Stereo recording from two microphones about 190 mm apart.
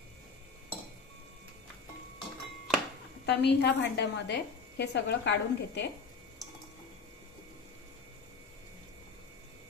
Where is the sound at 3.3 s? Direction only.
65° left (ahead or behind).